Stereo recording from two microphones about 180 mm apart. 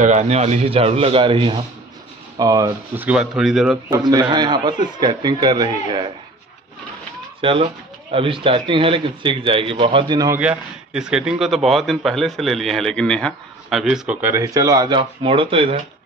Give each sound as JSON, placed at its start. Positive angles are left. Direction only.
{"t": 0.0, "sound": "speech", "side_deg": -40}
{"t": 3.9, "sound": "speech", "side_deg": -20}
{"t": 7.4, "sound": "speech", "side_deg": -35}
{"t": 10.4, "sound": "speech", "side_deg": -5}